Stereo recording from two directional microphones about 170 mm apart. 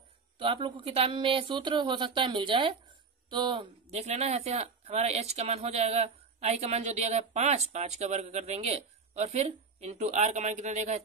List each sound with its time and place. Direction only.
0.4 s speech: 30° right (ahead or behind)
3.9 s speech: 40° right (ahead or behind)